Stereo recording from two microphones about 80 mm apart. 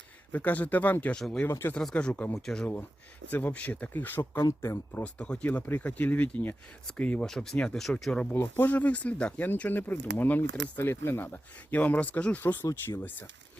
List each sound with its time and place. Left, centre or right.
0.3 s speech: left
1.5 s speech: left
1.8 s speech: centre
2.3 s speech: centre
3.2 s speech: centre
4.2 s speech: left
4.6 s speech: left
5.1 s speech: centre
8.3 s speech: left
11.8 s speech: centre